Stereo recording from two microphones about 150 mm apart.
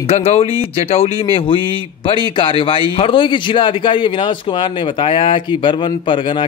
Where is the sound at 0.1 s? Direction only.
45° left (ahead or behind).